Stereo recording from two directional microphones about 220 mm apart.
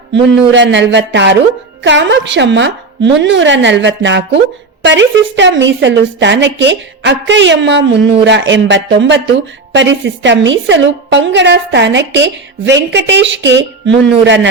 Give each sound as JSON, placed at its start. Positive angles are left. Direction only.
{"t": 0.1, "sound": "a woman's voice", "side_deg": -55}